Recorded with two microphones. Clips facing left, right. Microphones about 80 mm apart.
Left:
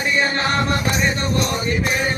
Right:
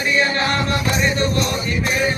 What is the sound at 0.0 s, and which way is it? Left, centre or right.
Music, left.